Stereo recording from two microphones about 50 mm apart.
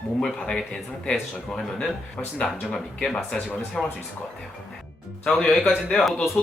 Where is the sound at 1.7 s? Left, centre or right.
Left.